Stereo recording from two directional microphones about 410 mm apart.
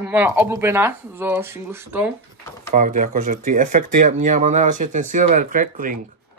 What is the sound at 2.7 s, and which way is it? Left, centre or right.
Speech, centre.